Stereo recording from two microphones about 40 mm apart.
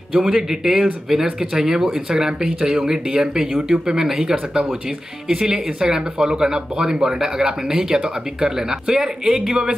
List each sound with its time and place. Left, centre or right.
0.1 s speech: centre
5.4 s speech: centre